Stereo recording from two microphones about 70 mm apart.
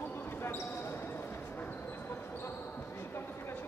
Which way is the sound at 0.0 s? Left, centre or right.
Left.